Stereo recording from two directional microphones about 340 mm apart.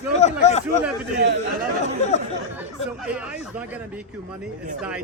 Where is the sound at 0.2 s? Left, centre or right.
Centre.